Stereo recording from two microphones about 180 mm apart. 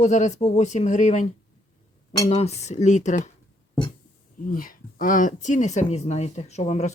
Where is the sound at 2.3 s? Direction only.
35° left (ahead or behind).